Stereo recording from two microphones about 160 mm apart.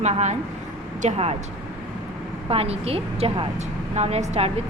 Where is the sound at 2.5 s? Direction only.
40° right (ahead or behind).